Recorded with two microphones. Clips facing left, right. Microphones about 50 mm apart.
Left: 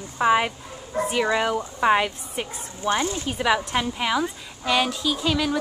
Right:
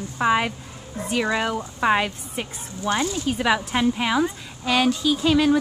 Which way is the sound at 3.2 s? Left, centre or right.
Centre.